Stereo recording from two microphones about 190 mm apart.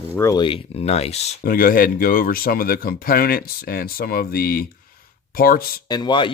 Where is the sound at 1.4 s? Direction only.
45° left (ahead or behind).